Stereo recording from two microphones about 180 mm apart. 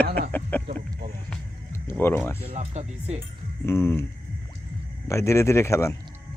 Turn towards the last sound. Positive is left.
turn(degrees=15)  # may be behind; listen again after turning